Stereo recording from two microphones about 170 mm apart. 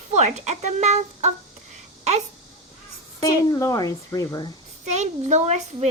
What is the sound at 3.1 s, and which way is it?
Speech, 20° left (ahead or behind).